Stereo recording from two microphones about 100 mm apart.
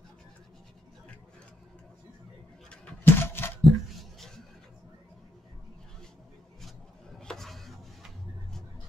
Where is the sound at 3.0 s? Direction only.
20° left (ahead or behind).